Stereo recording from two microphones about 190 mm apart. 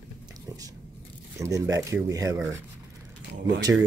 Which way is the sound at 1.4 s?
15° right (ahead or behind).